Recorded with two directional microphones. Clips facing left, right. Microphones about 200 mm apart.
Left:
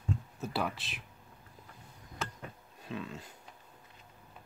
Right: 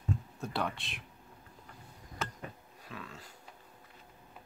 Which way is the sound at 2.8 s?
25° left (ahead or behind).